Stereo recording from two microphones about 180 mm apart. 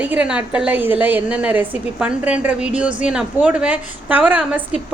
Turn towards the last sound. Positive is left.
turn(degrees=-5)  # may be behind; listen again after turning